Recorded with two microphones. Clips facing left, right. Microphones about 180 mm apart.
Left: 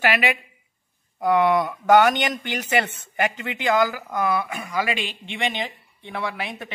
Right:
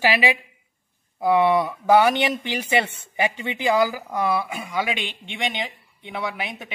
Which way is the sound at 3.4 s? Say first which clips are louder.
Right 1 dB; 10° right (ahead or behind).